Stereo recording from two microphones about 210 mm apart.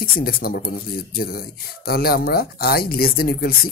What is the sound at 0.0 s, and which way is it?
Speech, 45° left (ahead or behind).